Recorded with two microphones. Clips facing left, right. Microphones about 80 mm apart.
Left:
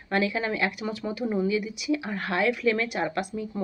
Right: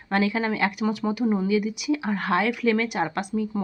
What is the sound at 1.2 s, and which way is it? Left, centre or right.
Speech, centre.